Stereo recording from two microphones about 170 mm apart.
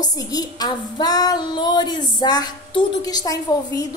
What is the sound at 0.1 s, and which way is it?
A woman's voice, 20° left (ahead or behind).